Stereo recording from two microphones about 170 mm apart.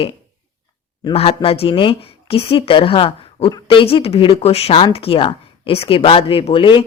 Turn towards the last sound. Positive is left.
turn(degrees=30)  # may be behind; listen again after turning